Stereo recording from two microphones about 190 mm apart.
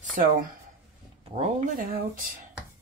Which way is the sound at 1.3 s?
35° right (ahead or behind).